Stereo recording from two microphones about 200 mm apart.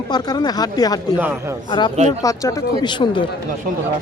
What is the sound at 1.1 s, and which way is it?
Speech, 10° right (ahead or behind).